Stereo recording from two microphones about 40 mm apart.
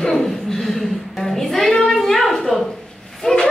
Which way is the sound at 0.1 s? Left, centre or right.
Centre.